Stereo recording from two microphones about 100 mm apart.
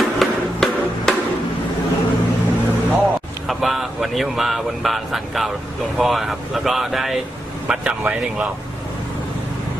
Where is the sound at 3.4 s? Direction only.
Centre (ahead or behind).